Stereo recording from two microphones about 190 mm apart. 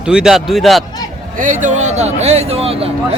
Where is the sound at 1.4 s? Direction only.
40° right (ahead or behind).